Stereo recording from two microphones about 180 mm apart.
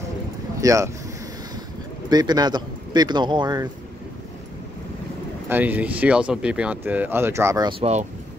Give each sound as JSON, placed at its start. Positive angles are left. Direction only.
{"t": 0.6, "sound": "speech", "side_deg": -15}
{"t": 2.0, "sound": "a man's voice", "side_deg": -20}
{"t": 5.5, "sound": "speech", "side_deg": -10}
{"t": 7.8, "sound": "speech", "side_deg": -40}